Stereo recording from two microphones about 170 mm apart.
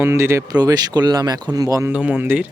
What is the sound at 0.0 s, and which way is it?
Speech, 15° right (ahead or behind).